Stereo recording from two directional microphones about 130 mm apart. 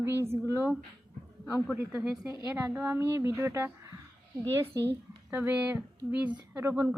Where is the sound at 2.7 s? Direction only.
15° right (ahead or behind).